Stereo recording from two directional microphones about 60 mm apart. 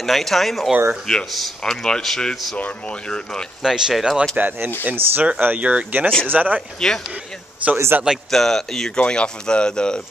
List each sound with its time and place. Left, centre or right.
0.0 s speech: centre
3.6 s speech: centre
4.4 s speech: right
6.8 s speech: centre
7.7 s a man's voice: right
8.3 s speech: centre